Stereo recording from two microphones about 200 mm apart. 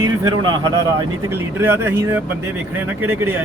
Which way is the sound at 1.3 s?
10° right (ahead or behind).